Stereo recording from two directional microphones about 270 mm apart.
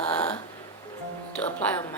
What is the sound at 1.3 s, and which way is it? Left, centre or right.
Speech, centre.